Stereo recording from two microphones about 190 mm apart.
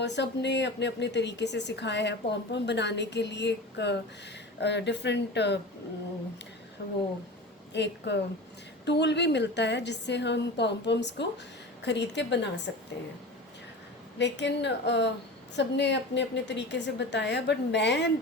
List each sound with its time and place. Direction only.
0.0 s a woman's voice: 65° left (ahead or behind)
7.7 s a woman's voice: 65° left (ahead or behind)
14.2 s a woman's voice: 65° left (ahead or behind)